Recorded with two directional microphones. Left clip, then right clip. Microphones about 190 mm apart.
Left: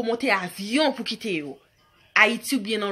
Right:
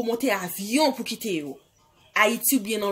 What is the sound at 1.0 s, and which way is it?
Speech, 40° left (ahead or behind).